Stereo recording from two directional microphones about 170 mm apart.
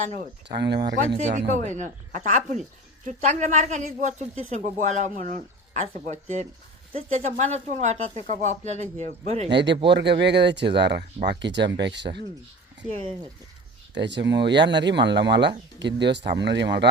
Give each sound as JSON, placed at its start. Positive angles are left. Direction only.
{"t": 0.4, "sound": "speech", "side_deg": -85}
{"t": 1.2, "sound": "speech", "side_deg": -45}
{"t": 9.5, "sound": "speech", "side_deg": -90}
{"t": 13.9, "sound": "speech", "side_deg": -90}